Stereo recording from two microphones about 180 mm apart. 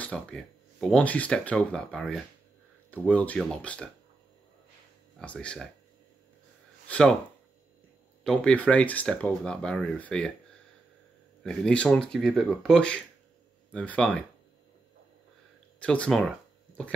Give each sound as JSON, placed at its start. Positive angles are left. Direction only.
{"t": 0.0, "sound": "speech", "side_deg": 5}
{"t": 5.2, "sound": "speech", "side_deg": 5}
{"t": 6.9, "sound": "speech", "side_deg": 5}
{"t": 8.2, "sound": "speech", "side_deg": 5}
{"t": 11.4, "sound": "speech", "side_deg": 5}
{"t": 15.8, "sound": "speech", "side_deg": 5}